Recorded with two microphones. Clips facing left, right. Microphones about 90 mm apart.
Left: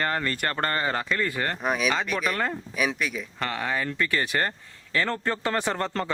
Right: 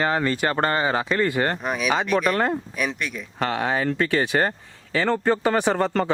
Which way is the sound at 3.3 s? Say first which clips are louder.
Right 7 dB; 55° right (ahead or behind).